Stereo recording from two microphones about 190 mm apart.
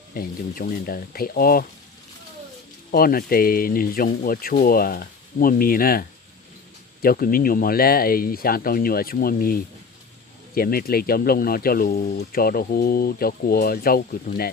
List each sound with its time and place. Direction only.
0.1 s speech: 50° left (ahead or behind)
2.9 s speech: 50° left (ahead or behind)